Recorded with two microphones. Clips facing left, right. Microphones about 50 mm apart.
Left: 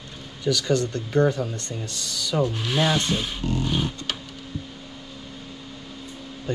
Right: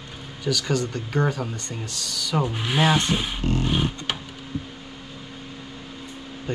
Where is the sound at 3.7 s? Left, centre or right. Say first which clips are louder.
Right 2 dB; right.